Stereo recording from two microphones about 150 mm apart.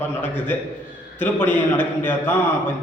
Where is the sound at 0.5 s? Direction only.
15° left (ahead or behind).